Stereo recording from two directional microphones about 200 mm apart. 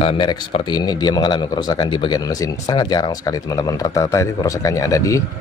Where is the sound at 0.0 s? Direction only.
25° left (ahead or behind).